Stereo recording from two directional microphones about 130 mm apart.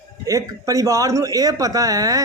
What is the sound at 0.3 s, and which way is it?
Speech, 25° right (ahead or behind).